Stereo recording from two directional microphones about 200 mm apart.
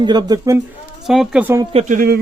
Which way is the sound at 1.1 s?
5° right (ahead or behind).